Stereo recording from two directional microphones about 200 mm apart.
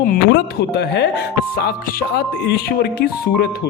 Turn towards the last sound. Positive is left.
turn(degrees=50)  # may be behind; listen again after turning